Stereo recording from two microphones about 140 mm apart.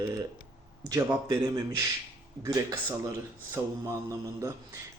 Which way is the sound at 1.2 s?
30° right (ahead or behind).